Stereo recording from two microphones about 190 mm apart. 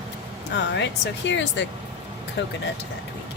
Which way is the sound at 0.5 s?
65° left (ahead or behind).